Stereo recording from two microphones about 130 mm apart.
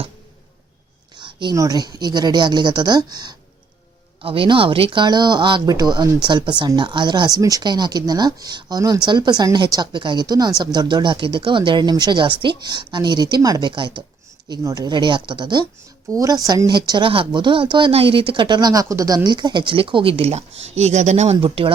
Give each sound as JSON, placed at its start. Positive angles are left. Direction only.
{"t": 1.1, "sound": "speech", "side_deg": -35}
{"t": 4.2, "sound": "speech", "side_deg": -45}
{"t": 21.4, "sound": "speech", "side_deg": -40}